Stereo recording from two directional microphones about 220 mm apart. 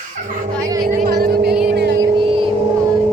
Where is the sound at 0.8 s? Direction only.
45° right (ahead or behind).